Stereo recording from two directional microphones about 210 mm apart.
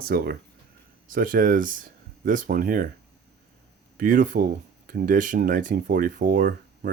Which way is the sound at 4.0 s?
40° right (ahead or behind).